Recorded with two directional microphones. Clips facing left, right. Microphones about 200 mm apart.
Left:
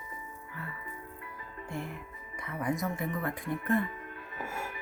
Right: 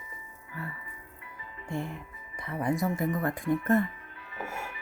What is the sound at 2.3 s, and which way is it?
Speech, 35° right (ahead or behind).